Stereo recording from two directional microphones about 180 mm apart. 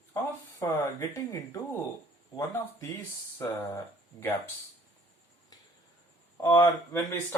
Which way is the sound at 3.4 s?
15° left (ahead or behind).